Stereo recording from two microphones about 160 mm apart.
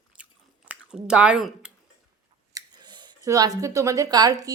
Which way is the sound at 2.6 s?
25° right (ahead or behind).